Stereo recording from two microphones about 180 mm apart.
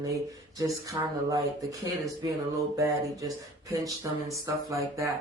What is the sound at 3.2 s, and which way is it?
Speech, 20° right (ahead or behind).